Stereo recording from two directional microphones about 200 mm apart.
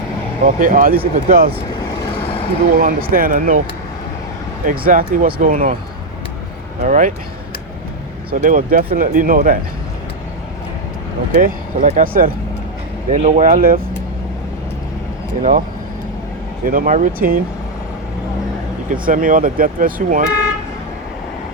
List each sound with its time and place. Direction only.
0.4 s speech: 40° right (ahead or behind)
2.1 s vehicle: 30° left (ahead or behind)
2.7 s speech: 45° right (ahead or behind)
4.6 s speech: 45° right (ahead or behind)
6.8 s speech: 40° right (ahead or behind)
8.3 s speech: 45° right (ahead or behind)
11.3 s speech: 40° right (ahead or behind)
15.4 s speech: 40° right (ahead or behind)
16.6 s speech: 45° right (ahead or behind)
18.9 s speech: 40° right (ahead or behind)